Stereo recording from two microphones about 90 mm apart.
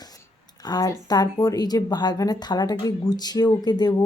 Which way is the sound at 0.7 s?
45° left (ahead or behind).